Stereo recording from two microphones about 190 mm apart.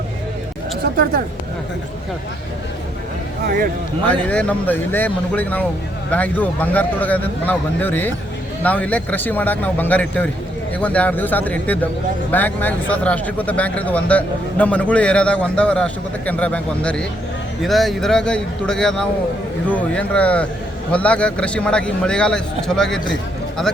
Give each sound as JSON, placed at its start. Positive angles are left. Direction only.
{"t": 3.4, "sound": "speech", "side_deg": -50}
{"t": 4.0, "sound": "a man's voice", "side_deg": 5}